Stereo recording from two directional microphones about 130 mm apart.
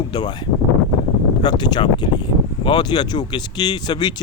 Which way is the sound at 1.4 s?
35° left (ahead or behind).